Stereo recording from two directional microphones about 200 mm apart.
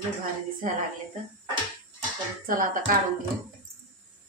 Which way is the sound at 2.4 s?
45° right (ahead or behind).